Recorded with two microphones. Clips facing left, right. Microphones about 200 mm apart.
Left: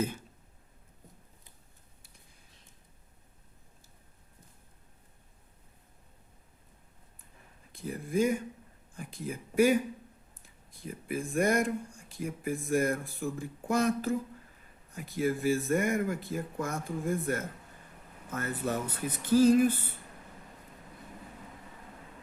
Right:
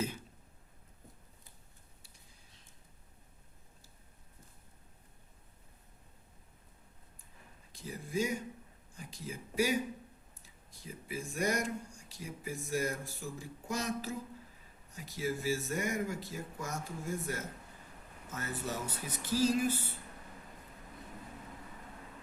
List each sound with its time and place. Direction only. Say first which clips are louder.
7.7 s speech: left 6 dB; 55° left (ahead or behind)